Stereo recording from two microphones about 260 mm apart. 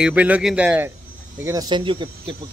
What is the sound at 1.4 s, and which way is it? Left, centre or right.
Speech, centre.